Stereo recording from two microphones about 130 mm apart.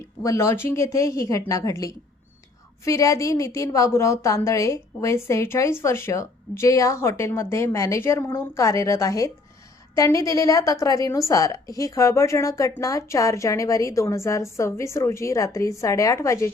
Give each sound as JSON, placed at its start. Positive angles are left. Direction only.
{"t": 0.2, "sound": "a woman's voice", "side_deg": 25}